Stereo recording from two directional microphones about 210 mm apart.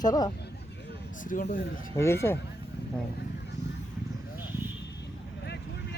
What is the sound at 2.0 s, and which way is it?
Speech, 15° left (ahead or behind).